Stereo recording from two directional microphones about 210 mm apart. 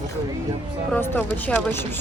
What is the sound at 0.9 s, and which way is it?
Speech, 5° left (ahead or behind).